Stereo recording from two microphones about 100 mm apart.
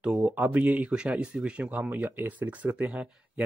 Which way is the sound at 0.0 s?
15° right (ahead or behind).